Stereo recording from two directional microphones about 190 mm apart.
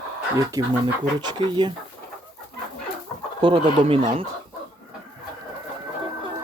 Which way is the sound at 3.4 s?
30° right (ahead or behind).